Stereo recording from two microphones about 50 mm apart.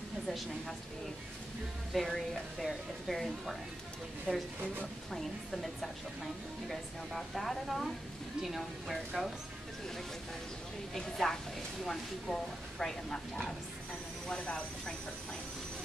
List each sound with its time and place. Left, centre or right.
2.0 s speech: centre
4.3 s speech: centre
5.1 s speech: centre
10.9 s speech: centre